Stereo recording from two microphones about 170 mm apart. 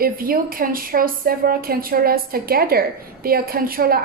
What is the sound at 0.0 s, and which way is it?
A woman's voice, 60° right (ahead or behind).